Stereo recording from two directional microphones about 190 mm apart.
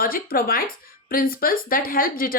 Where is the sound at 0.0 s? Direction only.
50° left (ahead or behind).